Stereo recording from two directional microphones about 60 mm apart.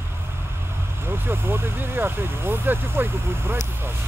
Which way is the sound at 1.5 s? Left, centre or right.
Right.